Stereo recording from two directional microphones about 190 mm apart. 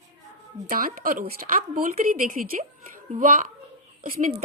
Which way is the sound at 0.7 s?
50° right (ahead or behind).